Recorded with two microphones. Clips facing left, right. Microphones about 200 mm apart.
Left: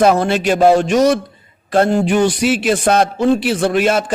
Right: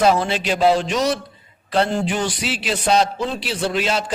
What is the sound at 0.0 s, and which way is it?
A man's voice, 60° left (ahead or behind).